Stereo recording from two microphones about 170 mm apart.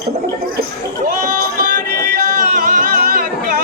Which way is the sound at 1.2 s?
55° right (ahead or behind).